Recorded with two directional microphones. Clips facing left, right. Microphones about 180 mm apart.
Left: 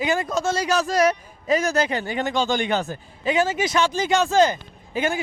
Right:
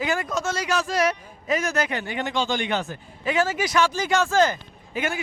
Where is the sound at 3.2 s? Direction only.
20° left (ahead or behind).